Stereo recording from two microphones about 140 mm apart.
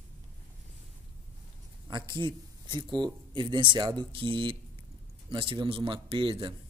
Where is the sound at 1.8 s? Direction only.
35° right (ahead or behind).